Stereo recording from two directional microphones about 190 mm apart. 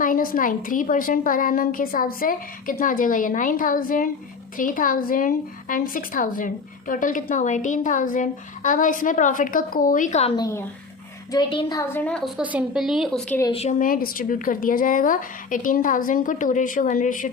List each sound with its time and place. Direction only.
0.0 s speech: 45° left (ahead or behind)
10.3 s a woman's voice: 20° left (ahead or behind)
12.4 s a woman's voice: 5° right (ahead or behind)
13.5 s speech: 35° left (ahead or behind)